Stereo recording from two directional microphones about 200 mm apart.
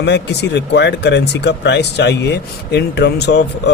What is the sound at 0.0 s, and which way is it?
Speech, 60° left (ahead or behind).